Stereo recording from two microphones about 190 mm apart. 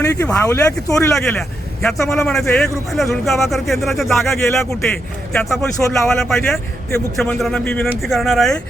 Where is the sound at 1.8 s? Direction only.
Centre (ahead or behind).